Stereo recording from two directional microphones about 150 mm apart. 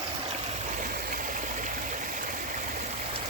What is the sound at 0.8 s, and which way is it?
Stream, 70° right (ahead or behind).